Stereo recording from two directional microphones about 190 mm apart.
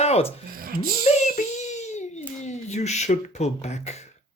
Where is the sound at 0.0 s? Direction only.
35° left (ahead or behind).